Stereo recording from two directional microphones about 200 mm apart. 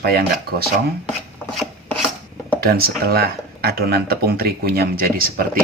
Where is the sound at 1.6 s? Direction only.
Centre (ahead or behind).